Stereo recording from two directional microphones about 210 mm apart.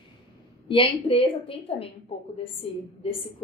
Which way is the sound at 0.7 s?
25° left (ahead or behind).